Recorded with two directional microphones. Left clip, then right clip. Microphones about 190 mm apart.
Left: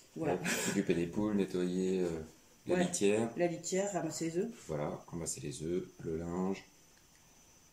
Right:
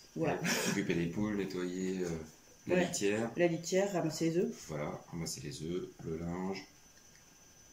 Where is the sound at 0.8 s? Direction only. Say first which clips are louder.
Left 2 dB; 15° left (ahead or behind).